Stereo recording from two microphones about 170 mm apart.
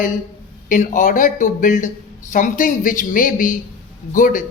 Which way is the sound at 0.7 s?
50° left (ahead or behind).